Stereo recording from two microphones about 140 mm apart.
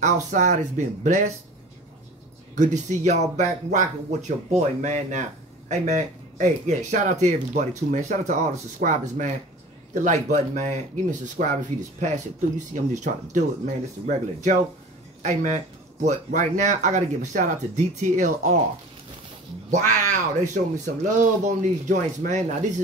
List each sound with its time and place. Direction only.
0.0 s speech: 60° right (ahead or behind)
2.5 s speech: 60° right (ahead or behind)
20.1 s speech: 60° right (ahead or behind)